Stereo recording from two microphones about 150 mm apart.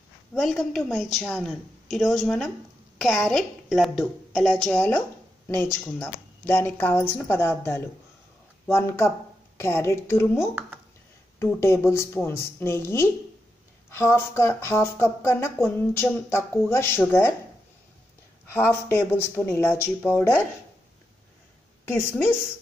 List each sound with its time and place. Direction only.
0.3 s a woman's voice: centre (ahead or behind)
18.5 s speech: 15° left (ahead or behind)
21.8 s speech: 15° left (ahead or behind)